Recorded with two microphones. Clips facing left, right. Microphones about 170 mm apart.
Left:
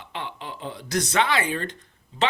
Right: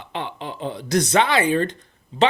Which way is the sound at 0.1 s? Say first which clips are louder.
Right 5 dB; 25° right (ahead or behind).